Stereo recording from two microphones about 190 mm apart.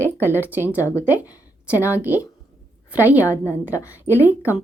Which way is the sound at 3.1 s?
15° left (ahead or behind).